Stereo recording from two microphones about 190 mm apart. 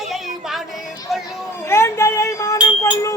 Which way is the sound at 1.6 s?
15° left (ahead or behind).